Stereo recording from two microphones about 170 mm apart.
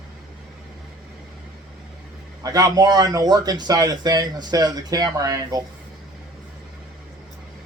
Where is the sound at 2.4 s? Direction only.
20° right (ahead or behind).